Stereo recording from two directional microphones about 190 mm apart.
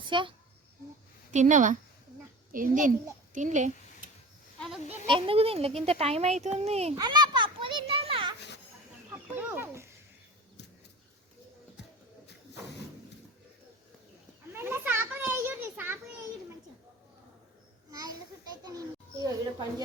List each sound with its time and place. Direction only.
0.0 s a child's voice: 25° right (ahead or behind)
1.3 s a child's voice: 40° right (ahead or behind)
5.0 s speech: 25° right (ahead or behind)
6.9 s children playing: 20° right (ahead or behind)
9.3 s speech: 10° right (ahead or behind)
14.5 s children playing: 10° right (ahead or behind)
18.6 s a child's voice: 20° right (ahead or behind)